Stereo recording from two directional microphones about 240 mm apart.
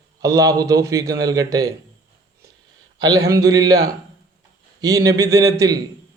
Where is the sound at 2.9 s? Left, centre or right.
Centre.